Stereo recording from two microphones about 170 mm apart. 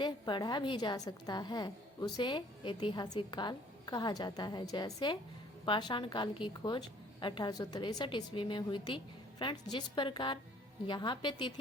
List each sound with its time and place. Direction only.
0.0 s a woman's voice: 25° left (ahead or behind)